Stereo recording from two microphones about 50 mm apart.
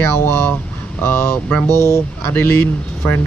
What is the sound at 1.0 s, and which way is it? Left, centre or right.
Speech, left.